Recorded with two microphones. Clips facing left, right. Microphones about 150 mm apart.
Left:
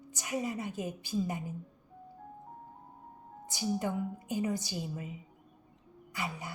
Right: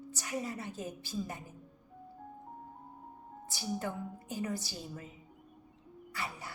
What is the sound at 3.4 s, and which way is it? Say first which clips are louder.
A woman's voice: left 4 dB; 20° left (ahead or behind).